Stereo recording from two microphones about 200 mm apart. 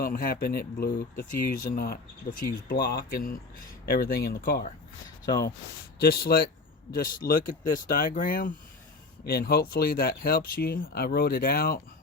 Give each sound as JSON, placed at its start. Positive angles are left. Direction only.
{"t": 0.0, "sound": "speech", "side_deg": 45}
{"t": 5.2, "sound": "speech", "side_deg": 20}
{"t": 6.0, "sound": "speech", "side_deg": 50}